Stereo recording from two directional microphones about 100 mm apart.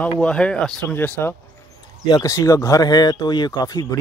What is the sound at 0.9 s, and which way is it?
Speech, 20° left (ahead or behind).